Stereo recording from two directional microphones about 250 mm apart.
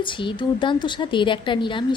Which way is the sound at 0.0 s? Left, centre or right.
Centre.